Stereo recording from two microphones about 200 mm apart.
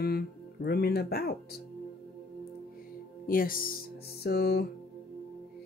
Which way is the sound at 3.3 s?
45° left (ahead or behind).